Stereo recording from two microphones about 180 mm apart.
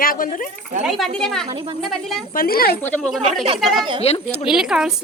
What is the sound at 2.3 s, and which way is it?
Speech, 55° left (ahead or behind).